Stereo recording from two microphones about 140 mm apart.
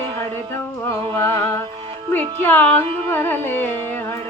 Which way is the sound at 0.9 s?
20° left (ahead or behind).